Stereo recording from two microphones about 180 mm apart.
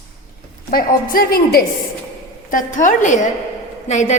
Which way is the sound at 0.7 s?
55° left (ahead or behind).